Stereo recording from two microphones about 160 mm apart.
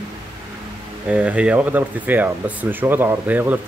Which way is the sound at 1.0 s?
5° right (ahead or behind).